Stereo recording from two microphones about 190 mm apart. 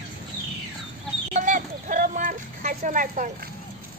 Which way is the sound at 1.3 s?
40° right (ahead or behind).